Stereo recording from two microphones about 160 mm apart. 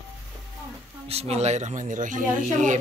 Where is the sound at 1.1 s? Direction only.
40° right (ahead or behind).